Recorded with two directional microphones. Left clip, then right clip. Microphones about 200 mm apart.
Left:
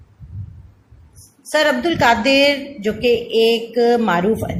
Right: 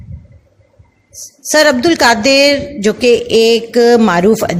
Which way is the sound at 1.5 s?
50° right (ahead or behind).